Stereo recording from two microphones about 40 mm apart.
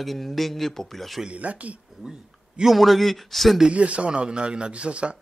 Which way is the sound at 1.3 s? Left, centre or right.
Right.